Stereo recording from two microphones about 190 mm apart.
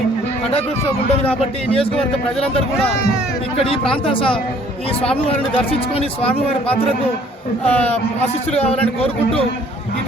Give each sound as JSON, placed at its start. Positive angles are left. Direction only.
{"t": 1.2, "sound": "speech", "side_deg": 30}
{"t": 3.6, "sound": "speech", "side_deg": 30}
{"t": 6.0, "sound": "speech", "side_deg": 30}
{"t": 7.7, "sound": "speech", "side_deg": 5}
{"t": 8.5, "sound": "speech", "side_deg": 30}